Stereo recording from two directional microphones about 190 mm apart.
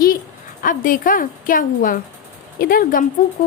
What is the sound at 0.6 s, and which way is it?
Speech, 45° left (ahead or behind).